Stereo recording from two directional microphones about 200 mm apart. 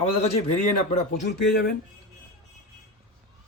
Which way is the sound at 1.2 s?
50° left (ahead or behind).